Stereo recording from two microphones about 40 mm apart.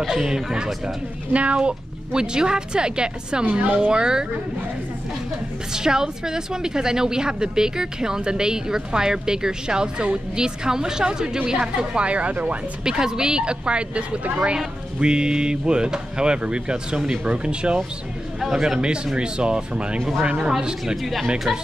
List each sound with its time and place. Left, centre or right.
0.0 s a woman's voice: centre
1.3 s speech: right
3.4 s speech: right
3.8 s speech: centre
5.7 s a woman's voice: centre; by 12.5 s right
12.8 s speech: centre
18.5 s speech: centre
20.8 s speech: centre